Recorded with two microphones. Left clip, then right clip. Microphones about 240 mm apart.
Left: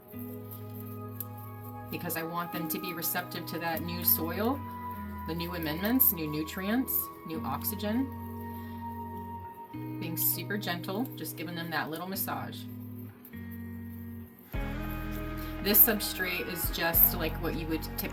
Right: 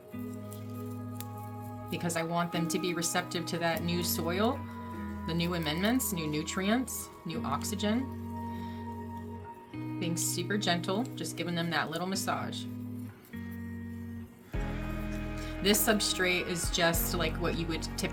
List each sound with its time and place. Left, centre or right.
2.0 s speech: right
10.3 s speech: right
15.6 s speech: right